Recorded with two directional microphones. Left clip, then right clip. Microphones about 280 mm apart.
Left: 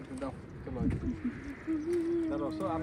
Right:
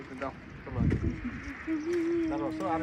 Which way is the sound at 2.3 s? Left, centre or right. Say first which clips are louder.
Right 3 dB; right.